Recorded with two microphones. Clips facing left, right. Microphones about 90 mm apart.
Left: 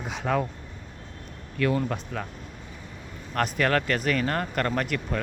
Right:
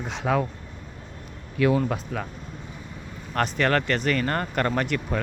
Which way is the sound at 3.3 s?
Centre (ahead or behind).